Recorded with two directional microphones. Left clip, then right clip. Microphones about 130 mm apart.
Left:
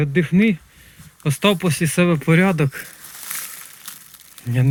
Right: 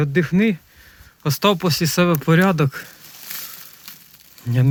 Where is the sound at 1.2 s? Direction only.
60° right (ahead or behind).